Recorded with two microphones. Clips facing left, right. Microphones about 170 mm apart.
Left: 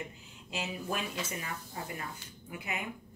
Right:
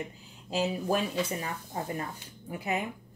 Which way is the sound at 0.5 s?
35° right (ahead or behind).